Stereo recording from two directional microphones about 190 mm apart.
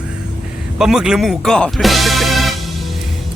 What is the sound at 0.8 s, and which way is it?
Speech, centre (ahead or behind).